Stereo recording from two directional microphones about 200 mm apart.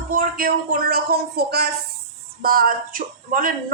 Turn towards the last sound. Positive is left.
turn(degrees=-45)  # may be behind; listen again after turning